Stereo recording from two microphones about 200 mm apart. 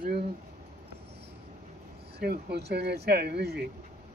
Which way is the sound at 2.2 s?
55° right (ahead or behind).